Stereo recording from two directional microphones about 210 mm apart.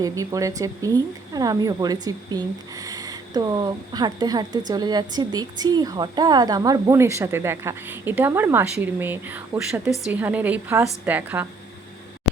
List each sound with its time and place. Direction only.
0.0 s speech: 15° right (ahead or behind)